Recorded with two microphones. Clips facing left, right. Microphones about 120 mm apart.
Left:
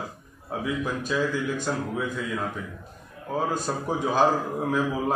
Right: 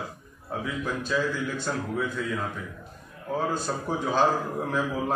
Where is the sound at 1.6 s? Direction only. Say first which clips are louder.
Left 1 dB; 10° left (ahead or behind).